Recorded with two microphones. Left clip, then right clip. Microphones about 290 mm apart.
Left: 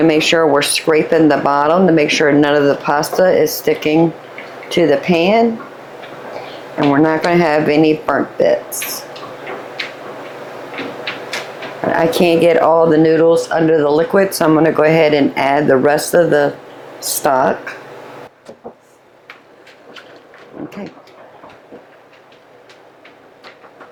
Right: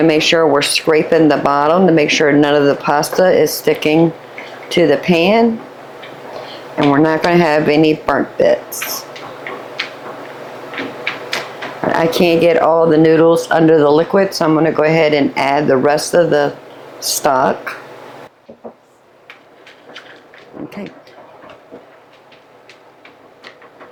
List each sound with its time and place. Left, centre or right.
0.0 s speech: right
6.7 s speech: right
11.9 s speech: right